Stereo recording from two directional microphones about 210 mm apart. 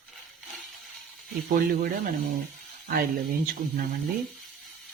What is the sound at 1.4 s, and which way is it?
Speech, 45° right (ahead or behind).